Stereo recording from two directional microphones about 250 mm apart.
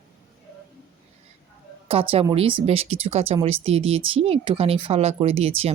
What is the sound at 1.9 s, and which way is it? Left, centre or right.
Speech, right.